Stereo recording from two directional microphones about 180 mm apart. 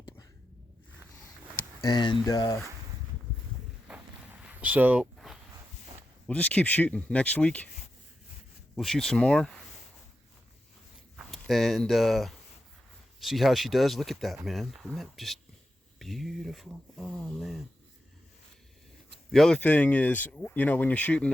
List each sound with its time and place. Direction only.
1.9 s speech: 25° left (ahead or behind)
4.4 s a sound: 10° right (ahead or behind)
6.2 s speech: 10° left (ahead or behind)
8.7 s speech: centre (ahead or behind)
11.2 s speech: centre (ahead or behind)
19.3 s speech: 5° left (ahead or behind)